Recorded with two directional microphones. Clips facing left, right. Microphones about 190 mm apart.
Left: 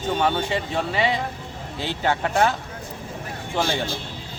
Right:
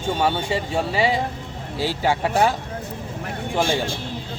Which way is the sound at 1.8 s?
5° right (ahead or behind).